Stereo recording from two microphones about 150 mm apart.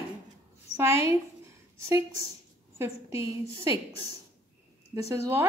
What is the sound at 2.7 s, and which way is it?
Speech, 20° right (ahead or behind).